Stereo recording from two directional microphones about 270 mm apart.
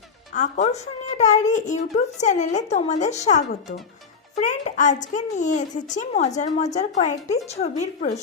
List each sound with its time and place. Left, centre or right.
0.3 s a woman's voice: left